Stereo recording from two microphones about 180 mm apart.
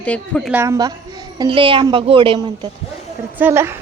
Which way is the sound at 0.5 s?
15° right (ahead or behind).